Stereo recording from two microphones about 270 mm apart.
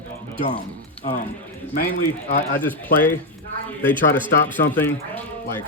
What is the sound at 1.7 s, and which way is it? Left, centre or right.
Speech, left.